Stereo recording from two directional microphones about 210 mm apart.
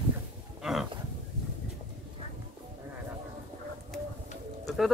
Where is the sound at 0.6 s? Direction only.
Centre (ahead or behind).